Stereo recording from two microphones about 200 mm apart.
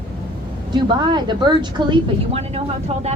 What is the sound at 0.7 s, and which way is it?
A woman's voice, 20° right (ahead or behind).